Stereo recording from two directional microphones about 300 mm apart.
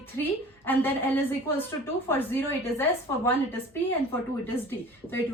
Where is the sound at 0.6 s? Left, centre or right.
Centre.